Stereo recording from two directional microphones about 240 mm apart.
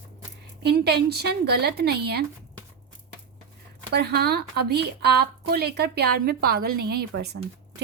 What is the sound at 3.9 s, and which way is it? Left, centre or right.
A woman's voice, right.